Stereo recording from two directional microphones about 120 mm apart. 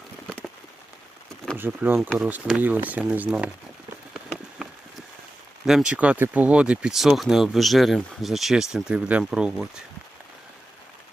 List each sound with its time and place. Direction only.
1.5 s speech: 15° right (ahead or behind)
4.1 s rain on surface: 5° right (ahead or behind)
5.6 s speech: 5° right (ahead or behind)